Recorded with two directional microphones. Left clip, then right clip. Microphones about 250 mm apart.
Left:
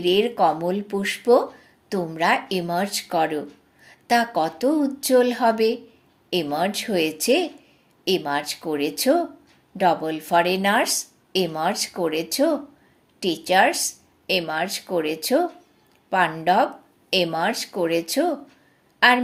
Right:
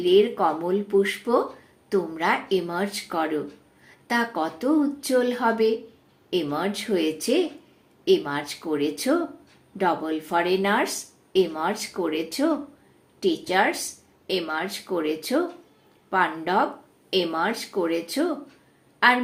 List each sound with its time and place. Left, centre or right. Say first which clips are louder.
0.0 s a woman's voice: even; left